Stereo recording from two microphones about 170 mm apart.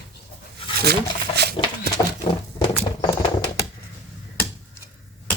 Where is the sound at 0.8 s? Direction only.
75° right (ahead or behind).